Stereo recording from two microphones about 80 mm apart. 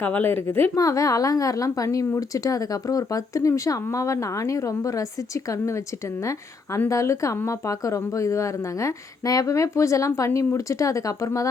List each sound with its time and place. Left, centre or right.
0.0 s speech: left
0.8 s a woman's voice: left